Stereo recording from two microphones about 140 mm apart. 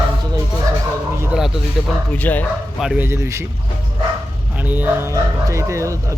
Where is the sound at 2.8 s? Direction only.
5° right (ahead or behind).